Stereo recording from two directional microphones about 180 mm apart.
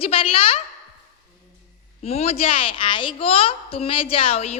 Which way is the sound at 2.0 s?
35° left (ahead or behind).